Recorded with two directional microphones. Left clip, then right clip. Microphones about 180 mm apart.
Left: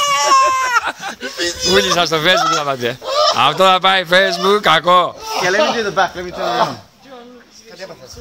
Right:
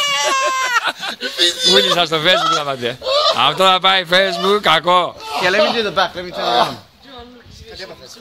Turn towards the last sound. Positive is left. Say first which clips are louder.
# right 2 dB
turn(degrees=-50)  # may be behind; listen again after turning